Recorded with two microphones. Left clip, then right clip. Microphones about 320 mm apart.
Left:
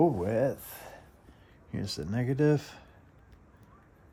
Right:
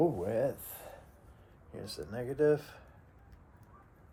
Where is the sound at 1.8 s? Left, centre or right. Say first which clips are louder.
Left 5 dB; left.